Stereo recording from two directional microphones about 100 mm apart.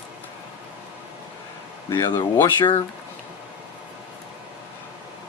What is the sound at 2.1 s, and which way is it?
Speech, 45° left (ahead or behind).